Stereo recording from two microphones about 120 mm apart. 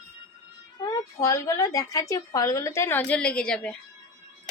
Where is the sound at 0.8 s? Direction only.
30° left (ahead or behind); by 3.7 s 5° left (ahead or behind).